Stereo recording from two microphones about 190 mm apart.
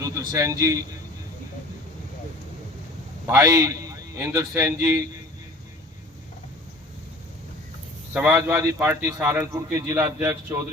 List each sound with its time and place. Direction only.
0.0 s a man's voice: 15° right (ahead or behind)
3.2 s a man's voice: 15° right (ahead or behind)
8.1 s a man's voice: 5° right (ahead or behind)